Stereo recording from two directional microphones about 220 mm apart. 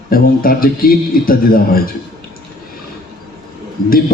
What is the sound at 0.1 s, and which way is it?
A man's voice, 40° left (ahead or behind).